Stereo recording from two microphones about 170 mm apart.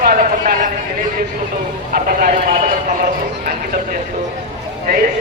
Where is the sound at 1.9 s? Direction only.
55° right (ahead or behind).